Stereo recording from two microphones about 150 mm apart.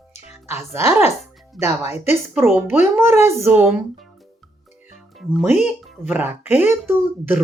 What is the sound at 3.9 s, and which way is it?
Music, centre (ahead or behind).